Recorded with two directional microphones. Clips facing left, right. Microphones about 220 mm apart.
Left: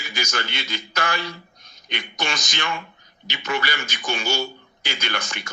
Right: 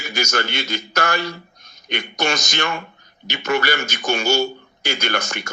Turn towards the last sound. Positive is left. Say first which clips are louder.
# right 6 dB
turn(degrees=-45)  # may be behind; listen again after turning